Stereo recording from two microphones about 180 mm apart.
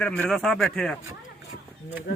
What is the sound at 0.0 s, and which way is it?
Speech, 5° left (ahead or behind).